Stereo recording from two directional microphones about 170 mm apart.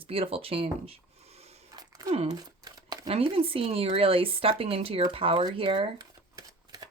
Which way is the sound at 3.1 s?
35° right (ahead or behind).